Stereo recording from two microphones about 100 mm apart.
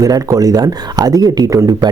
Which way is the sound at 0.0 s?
35° right (ahead or behind).